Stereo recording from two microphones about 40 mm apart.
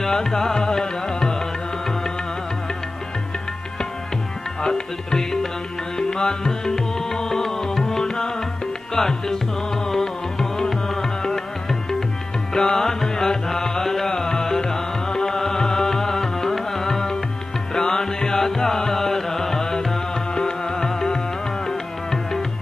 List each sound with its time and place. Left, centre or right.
0.0 s music: centre
4.6 s music: centre
12.5 s music: centre